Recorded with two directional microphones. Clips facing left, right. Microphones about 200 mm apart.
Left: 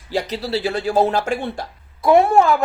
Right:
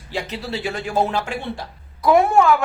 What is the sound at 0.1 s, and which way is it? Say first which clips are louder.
Speech: left 5 dB; 40° left (ahead or behind).